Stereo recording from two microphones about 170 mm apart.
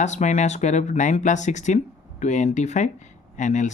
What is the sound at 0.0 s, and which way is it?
Speech, 45° left (ahead or behind).